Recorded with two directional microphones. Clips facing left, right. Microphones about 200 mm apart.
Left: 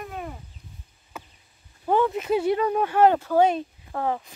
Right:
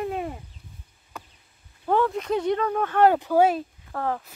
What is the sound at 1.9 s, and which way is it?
Speech, 5° left (ahead or behind).